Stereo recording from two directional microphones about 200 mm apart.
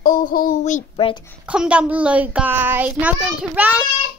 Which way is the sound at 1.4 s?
5° right (ahead or behind).